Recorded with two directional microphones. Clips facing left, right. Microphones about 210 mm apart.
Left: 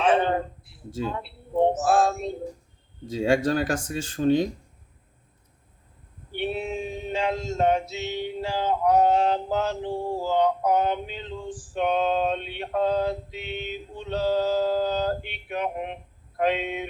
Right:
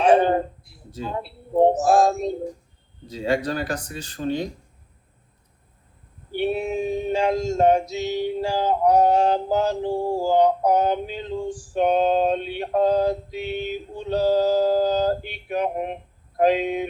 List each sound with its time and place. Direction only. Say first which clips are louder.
0.0 s a sound: right 5 dB; 40° right (ahead or behind)
1.8 s male singing: right 4 dB; 40° right (ahead or behind)
3.2 s speech: left 2 dB; 45° left (ahead or behind)
6.3 s male singing: right 5 dB; 40° right (ahead or behind)